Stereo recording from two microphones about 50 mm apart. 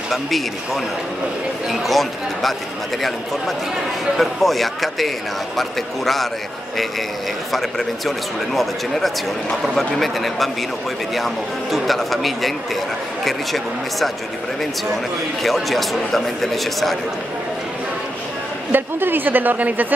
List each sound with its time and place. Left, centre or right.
1.7 s speech: centre
4.2 s speech: centre
9.6 s speech: centre
15.4 s speech: centre
18.7 s a woman's voice: right